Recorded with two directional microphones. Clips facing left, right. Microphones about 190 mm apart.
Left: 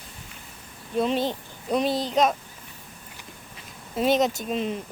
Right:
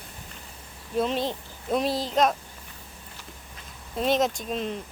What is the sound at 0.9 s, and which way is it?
Speech, centre (ahead or behind).